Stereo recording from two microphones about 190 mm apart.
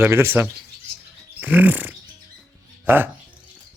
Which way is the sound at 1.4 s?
10° right (ahead or behind).